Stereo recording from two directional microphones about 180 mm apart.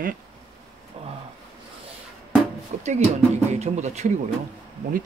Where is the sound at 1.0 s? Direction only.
35° right (ahead or behind).